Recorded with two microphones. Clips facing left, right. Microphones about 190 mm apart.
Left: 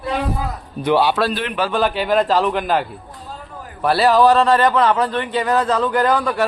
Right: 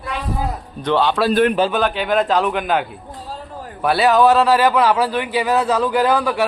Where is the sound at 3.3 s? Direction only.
30° right (ahead or behind).